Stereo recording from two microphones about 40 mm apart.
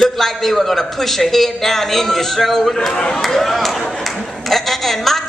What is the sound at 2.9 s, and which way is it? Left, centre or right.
Speech, left.